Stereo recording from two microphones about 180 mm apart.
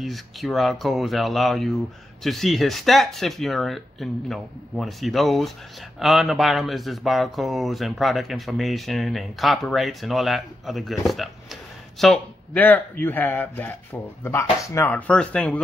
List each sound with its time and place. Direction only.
0.0 s speech: centre (ahead or behind)